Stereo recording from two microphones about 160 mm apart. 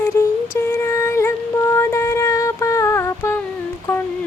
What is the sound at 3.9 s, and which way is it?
Humming, 10° left (ahead or behind).